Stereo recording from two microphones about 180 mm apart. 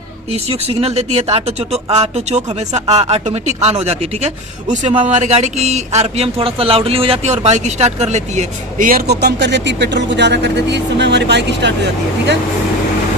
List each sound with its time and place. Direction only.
0.3 s speech: 35° right (ahead or behind); by 11.7 s 70° right (ahead or behind)